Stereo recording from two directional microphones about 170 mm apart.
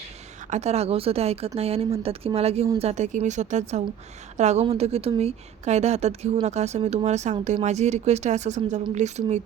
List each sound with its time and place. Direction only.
0.5 s a woman's voice: 40° right (ahead or behind)